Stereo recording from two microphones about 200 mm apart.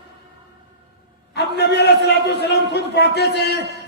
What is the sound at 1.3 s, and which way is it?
A man's voice, 55° left (ahead or behind).